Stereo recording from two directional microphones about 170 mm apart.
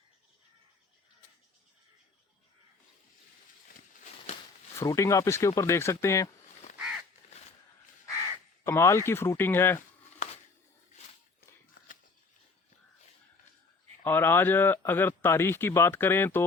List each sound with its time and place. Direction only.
4.8 s speech: 15° left (ahead or behind)
8.6 s speech: 15° left (ahead or behind)
14.0 s speech: 10° left (ahead or behind)